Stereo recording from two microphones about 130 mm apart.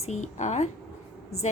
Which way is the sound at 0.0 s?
60° left (ahead or behind).